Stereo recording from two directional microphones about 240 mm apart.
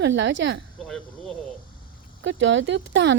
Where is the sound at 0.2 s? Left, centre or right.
Right.